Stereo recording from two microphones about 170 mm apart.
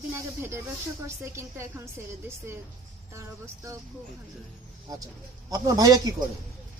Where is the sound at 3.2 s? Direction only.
15° right (ahead or behind).